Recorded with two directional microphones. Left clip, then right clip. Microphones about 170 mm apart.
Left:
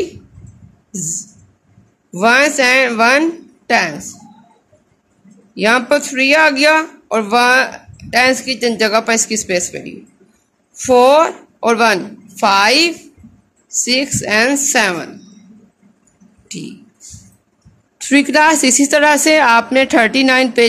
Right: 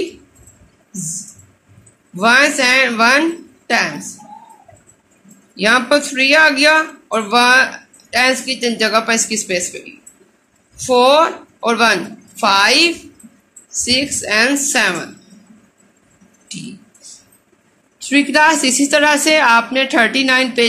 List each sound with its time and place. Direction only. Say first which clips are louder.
2.1 s speech: left 1 dB; 70° left (ahead or behind)
5.5 s speech: even; 70° left (ahead or behind)
18.0 s a woman's voice: left 1 dB; 65° left (ahead or behind)